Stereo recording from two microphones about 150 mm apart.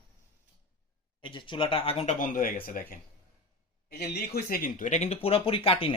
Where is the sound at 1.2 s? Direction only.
30° left (ahead or behind).